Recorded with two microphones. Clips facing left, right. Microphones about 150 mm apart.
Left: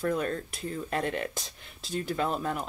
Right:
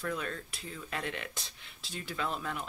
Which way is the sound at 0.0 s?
40° left (ahead or behind).